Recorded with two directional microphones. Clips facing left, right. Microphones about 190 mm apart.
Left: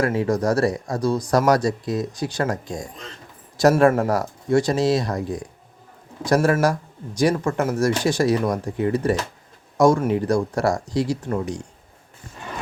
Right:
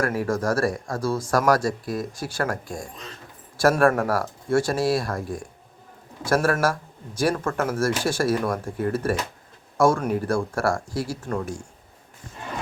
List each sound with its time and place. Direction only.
0.0 s speech: 25° left (ahead or behind)